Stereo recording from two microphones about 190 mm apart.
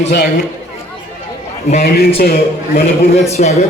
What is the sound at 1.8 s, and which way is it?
Speech, 60° left (ahead or behind).